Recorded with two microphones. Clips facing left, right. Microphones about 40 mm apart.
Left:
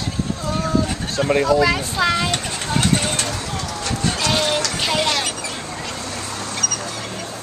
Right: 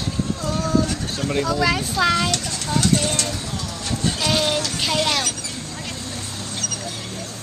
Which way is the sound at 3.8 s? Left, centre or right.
Left.